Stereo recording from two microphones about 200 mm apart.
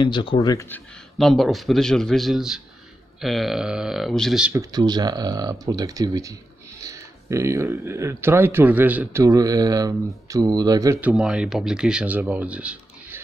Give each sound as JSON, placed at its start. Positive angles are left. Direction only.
{"t": 0.0, "sound": "speech", "side_deg": 25}
{"t": 1.1, "sound": "a man's voice", "side_deg": 0}
{"t": 4.6, "sound": "speech", "side_deg": -20}